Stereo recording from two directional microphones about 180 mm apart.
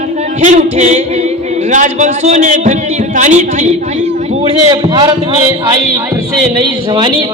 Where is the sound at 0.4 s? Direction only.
40° right (ahead or behind).